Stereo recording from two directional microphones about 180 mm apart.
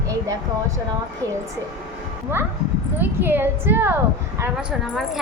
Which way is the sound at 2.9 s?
10° right (ahead or behind).